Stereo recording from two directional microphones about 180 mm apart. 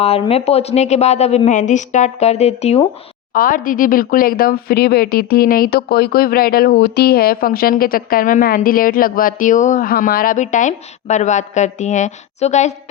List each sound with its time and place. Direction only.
0.0 s speech: 35° left (ahead or behind)
3.3 s speech: 50° left (ahead or behind)